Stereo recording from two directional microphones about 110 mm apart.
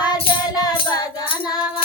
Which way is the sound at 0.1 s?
35° left (ahead or behind).